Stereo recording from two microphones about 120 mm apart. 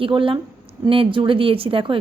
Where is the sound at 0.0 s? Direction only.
45° right (ahead or behind).